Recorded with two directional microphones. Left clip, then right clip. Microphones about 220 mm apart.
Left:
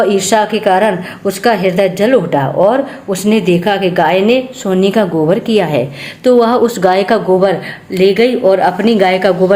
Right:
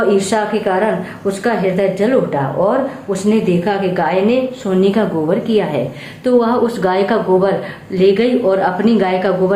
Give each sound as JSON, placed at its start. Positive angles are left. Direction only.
{"t": 0.1, "sound": "a woman's voice", "side_deg": 45}